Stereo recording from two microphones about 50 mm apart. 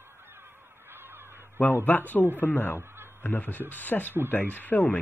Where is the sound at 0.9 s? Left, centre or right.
Right.